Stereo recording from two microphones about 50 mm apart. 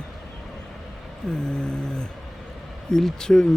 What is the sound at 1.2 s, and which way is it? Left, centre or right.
Speech, centre.